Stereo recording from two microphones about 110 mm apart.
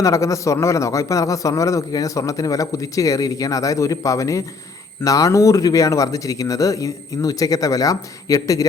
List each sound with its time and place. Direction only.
0.0 s a man's voice: 30° left (ahead or behind)